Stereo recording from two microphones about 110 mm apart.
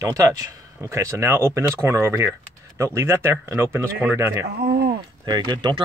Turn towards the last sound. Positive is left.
turn(degrees=-45)  # may be behind; listen again after turning